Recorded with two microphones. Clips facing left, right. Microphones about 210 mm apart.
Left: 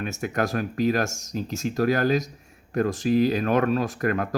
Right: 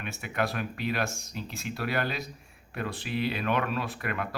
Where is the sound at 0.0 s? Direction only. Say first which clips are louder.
Left 5 dB; 45° left (ahead or behind).